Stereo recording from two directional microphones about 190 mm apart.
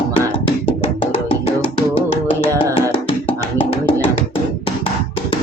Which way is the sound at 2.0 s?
30° left (ahead or behind).